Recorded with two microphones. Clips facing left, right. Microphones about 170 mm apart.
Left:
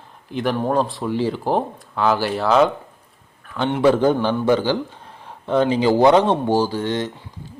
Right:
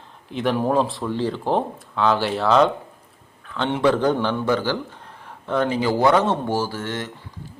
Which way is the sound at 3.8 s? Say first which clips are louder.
Left 3 dB; 10° left (ahead or behind).